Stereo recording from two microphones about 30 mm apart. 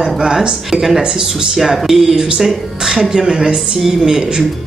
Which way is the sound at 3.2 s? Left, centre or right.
Right.